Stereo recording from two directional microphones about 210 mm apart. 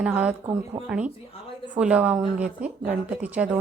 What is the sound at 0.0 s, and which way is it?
Speech, 5° right (ahead or behind).